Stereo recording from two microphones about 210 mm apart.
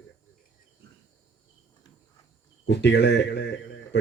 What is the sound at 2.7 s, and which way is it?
Speech, 55° left (ahead or behind).